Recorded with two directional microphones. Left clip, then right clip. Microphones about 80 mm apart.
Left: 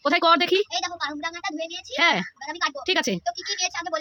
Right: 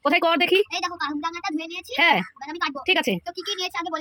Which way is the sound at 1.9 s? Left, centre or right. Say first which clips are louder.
Right 2 dB; centre.